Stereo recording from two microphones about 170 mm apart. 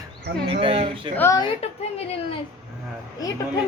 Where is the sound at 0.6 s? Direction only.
30° right (ahead or behind).